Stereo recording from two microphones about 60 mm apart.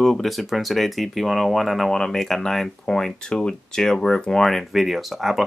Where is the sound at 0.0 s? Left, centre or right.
Centre.